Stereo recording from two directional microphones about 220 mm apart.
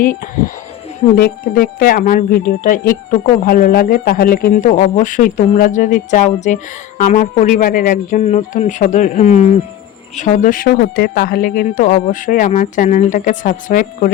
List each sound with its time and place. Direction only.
1.1 s speech: 40° left (ahead or behind)